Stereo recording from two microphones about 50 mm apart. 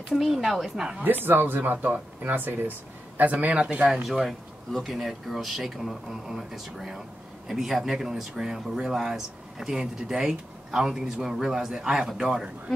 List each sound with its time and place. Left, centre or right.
0.1 s speech: centre
1.0 s speech: right
3.9 s speech: centre